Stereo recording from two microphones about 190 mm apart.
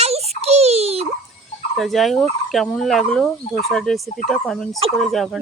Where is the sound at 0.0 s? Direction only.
35° right (ahead or behind).